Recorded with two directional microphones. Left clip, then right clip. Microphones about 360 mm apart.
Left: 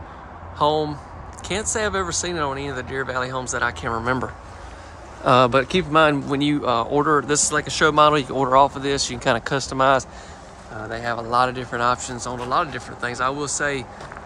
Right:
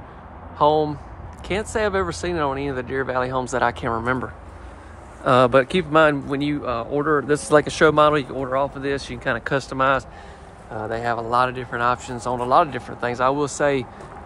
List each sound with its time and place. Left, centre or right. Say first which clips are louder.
0.6 s speech: right 2 dB; centre